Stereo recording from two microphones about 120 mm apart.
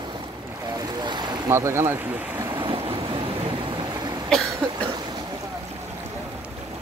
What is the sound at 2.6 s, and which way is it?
Vehicle, 45° right (ahead or behind).